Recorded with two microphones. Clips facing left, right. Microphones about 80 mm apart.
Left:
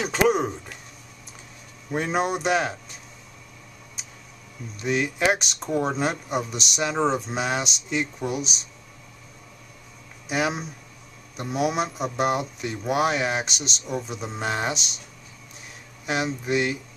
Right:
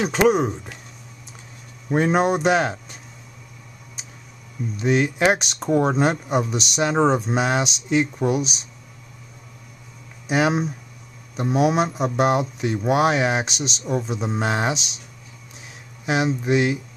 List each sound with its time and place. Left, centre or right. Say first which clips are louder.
0.0 s speech: right 3 dB; centre
2.1 s speech: right 3 dB; centre
4.7 s speech: right 5 dB; centre
10.2 s speech: right 5 dB; centre
11.5 s speech: right 5 dB; centre
16.1 s speech: right 5 dB; centre